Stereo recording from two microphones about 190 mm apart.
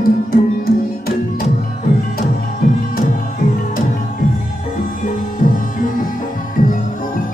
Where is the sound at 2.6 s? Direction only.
50° left (ahead or behind).